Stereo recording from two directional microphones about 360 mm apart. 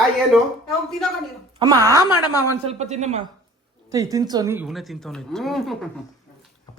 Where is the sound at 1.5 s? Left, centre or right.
Centre.